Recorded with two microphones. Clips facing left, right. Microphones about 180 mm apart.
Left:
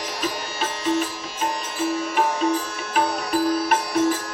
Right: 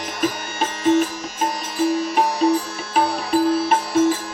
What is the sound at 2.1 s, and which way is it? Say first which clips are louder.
Music: right 3 dB; 35° right (ahead or behind).